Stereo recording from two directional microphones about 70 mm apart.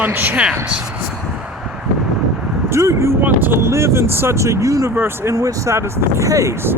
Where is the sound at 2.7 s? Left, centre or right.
Right.